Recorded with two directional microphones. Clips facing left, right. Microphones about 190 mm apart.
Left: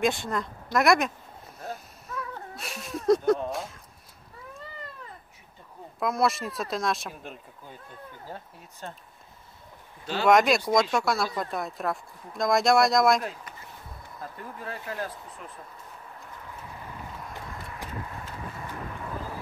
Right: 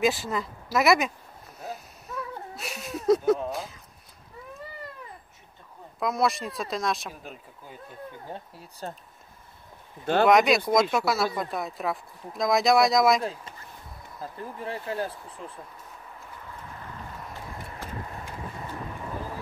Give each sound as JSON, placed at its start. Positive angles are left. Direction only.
{"t": 0.0, "sound": "speech", "side_deg": 0}
{"t": 1.6, "sound": "a sound", "side_deg": 0}
{"t": 5.9, "sound": "speech", "side_deg": 0}
{"t": 8.3, "sound": "speech", "side_deg": -35}
{"t": 10.2, "sound": "speech", "side_deg": 0}
{"t": 14.6, "sound": "speech", "side_deg": -25}